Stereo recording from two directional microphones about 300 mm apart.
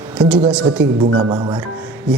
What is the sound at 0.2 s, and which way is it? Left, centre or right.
Speech, centre.